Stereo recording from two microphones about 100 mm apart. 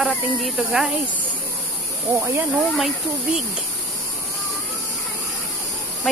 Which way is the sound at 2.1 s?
25° right (ahead or behind).